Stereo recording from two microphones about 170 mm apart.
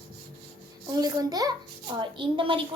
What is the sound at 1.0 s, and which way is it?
A child's voice, 20° right (ahead or behind).